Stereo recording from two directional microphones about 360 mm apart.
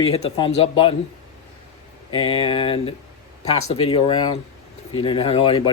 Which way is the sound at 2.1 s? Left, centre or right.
Centre.